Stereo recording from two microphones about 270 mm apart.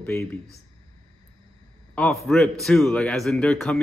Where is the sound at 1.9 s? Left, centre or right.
Centre.